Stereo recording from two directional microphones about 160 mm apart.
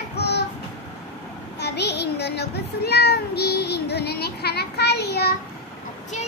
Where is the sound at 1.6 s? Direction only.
90° left.